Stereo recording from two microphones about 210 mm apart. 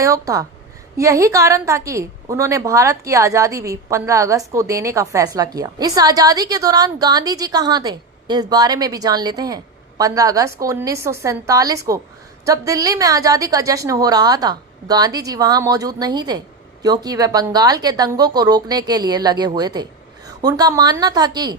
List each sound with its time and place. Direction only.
0.0 s a woman's voice: 15° right (ahead or behind)